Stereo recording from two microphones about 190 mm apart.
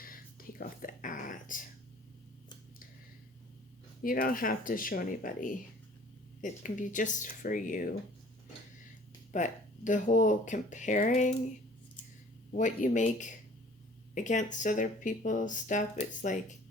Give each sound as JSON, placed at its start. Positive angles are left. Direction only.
{"t": 0.0, "sound": "whispering", "side_deg": 50}
{"t": 4.0, "sound": "speech", "side_deg": 50}
{"t": 9.3, "sound": "speech", "side_deg": 40}
{"t": 12.5, "sound": "speech", "side_deg": 40}